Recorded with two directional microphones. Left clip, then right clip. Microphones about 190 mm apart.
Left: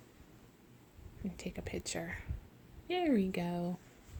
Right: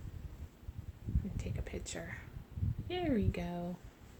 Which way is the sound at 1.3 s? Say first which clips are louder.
Left 7 dB; 45° left (ahead or behind).